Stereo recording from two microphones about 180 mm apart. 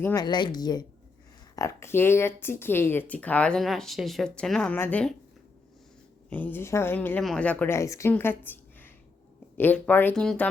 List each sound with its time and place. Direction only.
0.0 s a woman's voice: 15° left (ahead or behind)
0.3 s a woman's voice: 25° left (ahead or behind); by 5.1 s 10° left (ahead or behind)
6.3 s a woman's voice: 10° left (ahead or behind)